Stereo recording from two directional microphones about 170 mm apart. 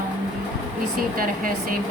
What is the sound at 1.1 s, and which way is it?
Speech, 55° right (ahead or behind).